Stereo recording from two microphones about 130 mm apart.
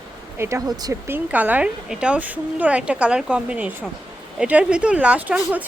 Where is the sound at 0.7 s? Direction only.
30° right (ahead or behind).